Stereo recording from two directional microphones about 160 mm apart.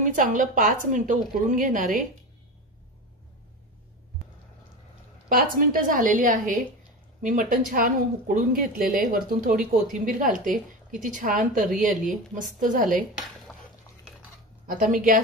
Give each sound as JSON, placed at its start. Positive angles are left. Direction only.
{"t": 0.0, "sound": "a woman's voice", "side_deg": -55}
{"t": 5.3, "sound": "a woman's voice", "side_deg": -60}
{"t": 13.5, "sound": "a sound", "side_deg": 0}
{"t": 14.7, "sound": "a woman's voice", "side_deg": -55}